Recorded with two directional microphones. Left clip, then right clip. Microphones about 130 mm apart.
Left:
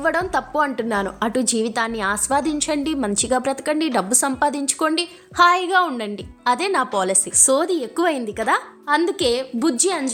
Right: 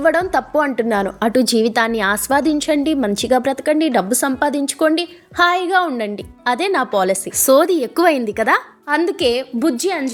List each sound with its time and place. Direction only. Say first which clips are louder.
0.0 s a woman's voice: right 5 dB; 25° right (ahead or behind)
7.3 s a woman's voice: right 7 dB; 40° right (ahead or behind)
8.9 s a woman's voice: right 2 dB; 15° right (ahead or behind)